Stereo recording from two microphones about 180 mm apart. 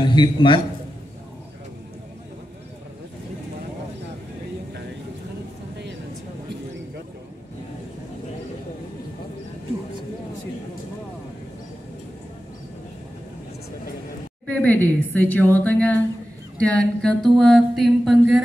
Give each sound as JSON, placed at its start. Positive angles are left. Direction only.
{"t": 0.0, "sound": "a man's voice", "side_deg": 25}
{"t": 14.4, "sound": "a sound", "side_deg": 10}
{"t": 16.5, "sound": "mantra", "side_deg": 5}